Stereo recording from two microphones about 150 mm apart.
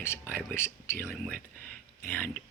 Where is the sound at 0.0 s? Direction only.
15° left (ahead or behind).